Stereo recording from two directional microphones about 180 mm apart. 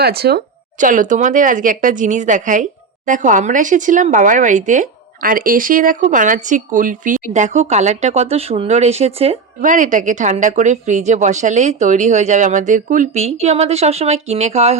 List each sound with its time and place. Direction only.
0.0 s speech: 60° right (ahead or behind); by 9.6 s 35° right (ahead or behind)
9.6 s speech: 45° right (ahead or behind)